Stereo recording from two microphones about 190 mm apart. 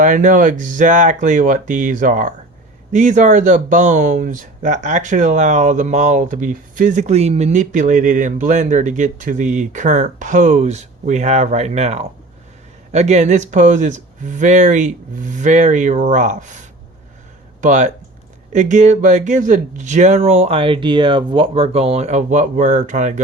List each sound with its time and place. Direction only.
0.0 s speech: 45° right (ahead or behind)
17.6 s speech: 40° right (ahead or behind)